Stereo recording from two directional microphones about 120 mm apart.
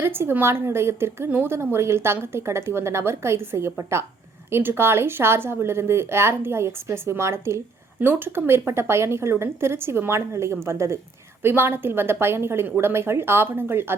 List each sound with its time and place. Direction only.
0.0 s a woman's voice: 20° right (ahead or behind)